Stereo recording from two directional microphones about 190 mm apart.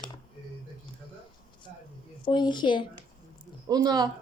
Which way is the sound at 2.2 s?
25° left (ahead or behind).